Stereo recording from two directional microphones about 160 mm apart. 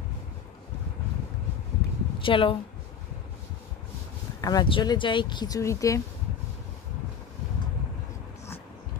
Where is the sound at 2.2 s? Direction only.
35° left (ahead or behind).